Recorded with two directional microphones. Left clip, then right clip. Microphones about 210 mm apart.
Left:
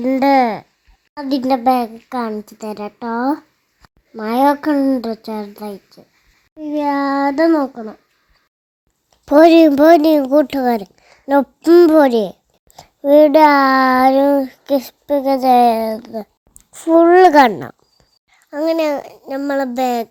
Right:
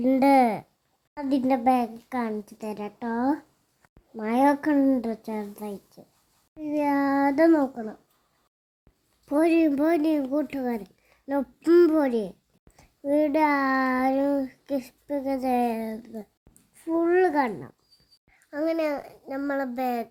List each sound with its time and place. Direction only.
0.0 s a child's voice: 10° left (ahead or behind)
9.2 s a child's voice: 30° left (ahead or behind)
18.3 s a child's voice: 20° left (ahead or behind)